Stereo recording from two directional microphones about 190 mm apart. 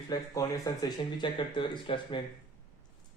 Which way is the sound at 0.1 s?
20° left (ahead or behind).